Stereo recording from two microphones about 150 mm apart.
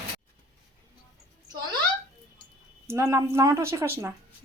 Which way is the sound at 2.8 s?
20° right (ahead or behind).